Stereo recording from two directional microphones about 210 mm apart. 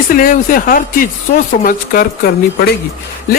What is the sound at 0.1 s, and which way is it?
Speech, 40° left (ahead or behind).